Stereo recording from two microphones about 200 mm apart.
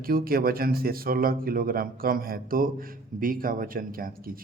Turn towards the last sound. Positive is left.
turn(degrees=-45)  # may be behind; listen again after turning